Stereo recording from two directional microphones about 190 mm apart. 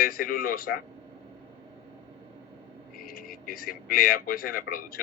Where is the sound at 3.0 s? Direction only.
50° left (ahead or behind).